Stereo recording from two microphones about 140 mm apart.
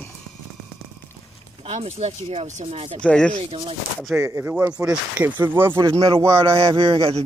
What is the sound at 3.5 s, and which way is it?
Speech, 40° right (ahead or behind).